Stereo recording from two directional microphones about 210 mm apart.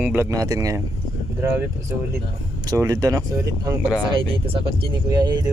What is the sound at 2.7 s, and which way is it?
Speech, 15° right (ahead or behind).